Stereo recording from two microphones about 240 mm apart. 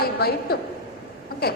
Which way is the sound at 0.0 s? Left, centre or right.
Left.